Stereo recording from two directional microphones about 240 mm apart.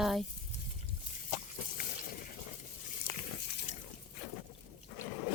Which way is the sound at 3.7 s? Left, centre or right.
Left.